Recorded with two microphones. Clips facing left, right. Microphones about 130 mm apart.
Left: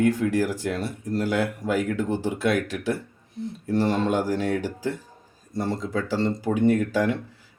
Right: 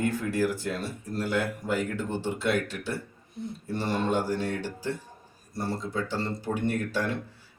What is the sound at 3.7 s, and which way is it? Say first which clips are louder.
Speech: left 5 dB; 90° left.